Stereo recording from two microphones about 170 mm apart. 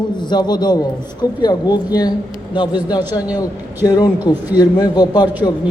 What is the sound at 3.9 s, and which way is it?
A man's voice, 20° left (ahead or behind).